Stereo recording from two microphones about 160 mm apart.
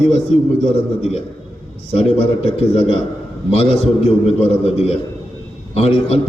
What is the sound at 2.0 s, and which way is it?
A man's voice, 35° left (ahead or behind).